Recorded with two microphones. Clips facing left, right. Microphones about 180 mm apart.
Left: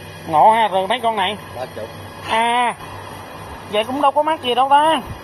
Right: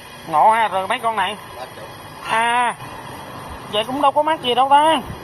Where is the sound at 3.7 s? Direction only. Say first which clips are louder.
Left 1 dB; 5° left (ahead or behind).